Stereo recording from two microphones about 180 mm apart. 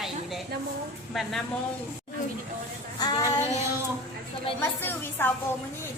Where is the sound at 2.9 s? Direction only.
20° left (ahead or behind).